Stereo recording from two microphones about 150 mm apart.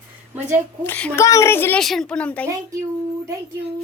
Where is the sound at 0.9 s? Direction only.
10° left (ahead or behind).